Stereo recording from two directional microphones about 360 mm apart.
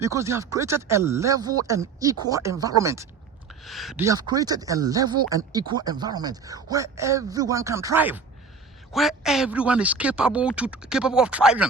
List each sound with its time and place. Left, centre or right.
0.0 s speech: centre